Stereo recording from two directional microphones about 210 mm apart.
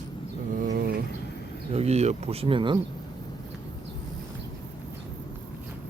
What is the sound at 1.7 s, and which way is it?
Speech, 30° right (ahead or behind).